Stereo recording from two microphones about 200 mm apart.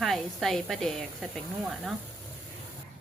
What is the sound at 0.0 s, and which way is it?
Speech, centre (ahead or behind).